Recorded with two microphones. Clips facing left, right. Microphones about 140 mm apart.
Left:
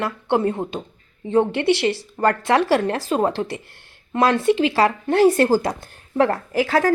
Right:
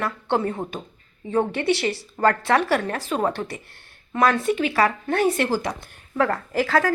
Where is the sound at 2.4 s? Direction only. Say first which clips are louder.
Left 3 dB; 25° left (ahead or behind).